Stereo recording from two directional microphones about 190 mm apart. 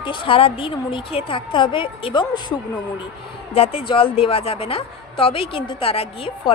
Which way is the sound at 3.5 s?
30° left (ahead or behind).